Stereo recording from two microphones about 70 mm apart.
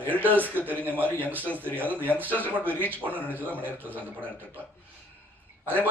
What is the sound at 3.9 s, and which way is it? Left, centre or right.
Mantra, right.